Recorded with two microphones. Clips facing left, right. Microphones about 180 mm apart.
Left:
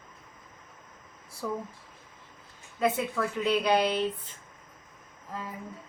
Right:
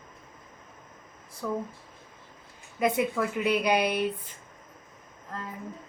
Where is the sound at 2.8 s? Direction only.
15° right (ahead or behind).